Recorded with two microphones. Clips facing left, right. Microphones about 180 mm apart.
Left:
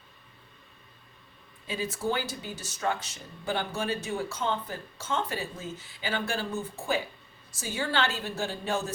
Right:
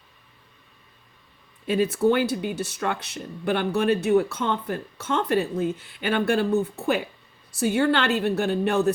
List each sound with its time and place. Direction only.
1.6 s speech: 60° right (ahead or behind)